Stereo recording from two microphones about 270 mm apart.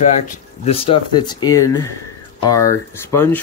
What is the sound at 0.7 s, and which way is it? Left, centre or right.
A man's voice, left.